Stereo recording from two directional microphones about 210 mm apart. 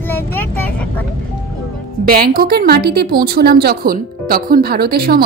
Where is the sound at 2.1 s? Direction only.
45° right (ahead or behind).